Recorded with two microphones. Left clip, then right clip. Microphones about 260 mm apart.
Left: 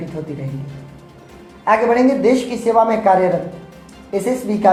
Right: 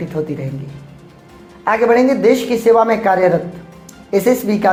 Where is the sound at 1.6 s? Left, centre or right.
Right.